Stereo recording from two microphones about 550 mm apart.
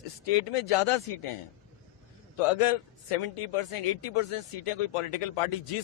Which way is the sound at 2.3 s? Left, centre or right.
Left.